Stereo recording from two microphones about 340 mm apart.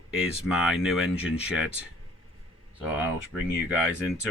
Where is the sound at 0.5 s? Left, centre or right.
Centre.